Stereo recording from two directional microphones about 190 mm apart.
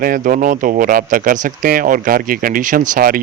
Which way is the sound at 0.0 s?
45° right (ahead or behind).